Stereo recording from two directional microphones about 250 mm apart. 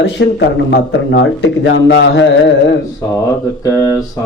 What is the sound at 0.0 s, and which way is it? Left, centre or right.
A man's voice, left.